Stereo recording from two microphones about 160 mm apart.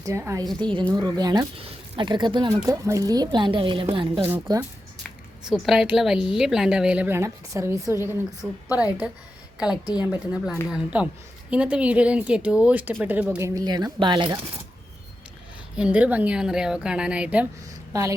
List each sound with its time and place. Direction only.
0.0 s a woman's voice: 15° right (ahead or behind)
0.6 s a woman's voice: 30° right (ahead or behind)
4.2 s a woman's voice: 15° right (ahead or behind)
5.5 s a woman's voice: centre (ahead or behind)
13.5 s a woman's voice: 25° right (ahead or behind)
15.7 s a woman's voice: 5° right (ahead or behind)